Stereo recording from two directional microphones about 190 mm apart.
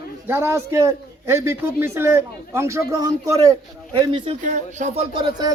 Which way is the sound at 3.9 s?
30° right (ahead or behind).